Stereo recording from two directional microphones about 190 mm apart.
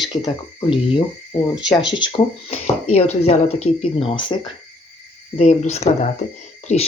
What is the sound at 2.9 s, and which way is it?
Speech, 35° left (ahead or behind).